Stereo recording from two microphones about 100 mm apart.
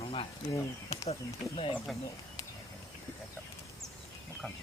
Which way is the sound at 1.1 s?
75° left (ahead or behind).